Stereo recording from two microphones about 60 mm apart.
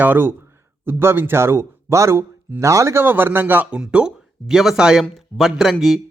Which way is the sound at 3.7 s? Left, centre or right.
Centre.